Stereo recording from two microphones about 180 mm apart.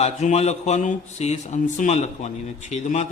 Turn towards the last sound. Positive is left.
turn(degrees=40)  # may be behind; listen again after turning